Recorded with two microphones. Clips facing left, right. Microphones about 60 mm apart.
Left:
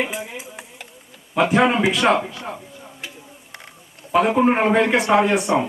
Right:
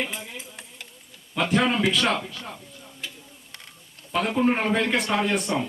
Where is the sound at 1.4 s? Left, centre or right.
Centre.